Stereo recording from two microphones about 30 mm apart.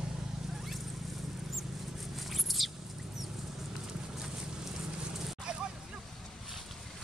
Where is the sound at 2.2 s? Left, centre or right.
Centre.